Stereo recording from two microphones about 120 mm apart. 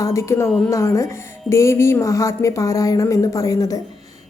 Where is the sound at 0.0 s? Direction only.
25° left (ahead or behind).